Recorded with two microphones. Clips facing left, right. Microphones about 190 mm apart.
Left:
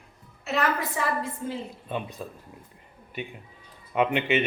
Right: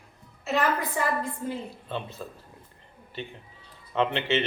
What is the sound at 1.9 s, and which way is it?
A woman's voice, 15° left (ahead or behind).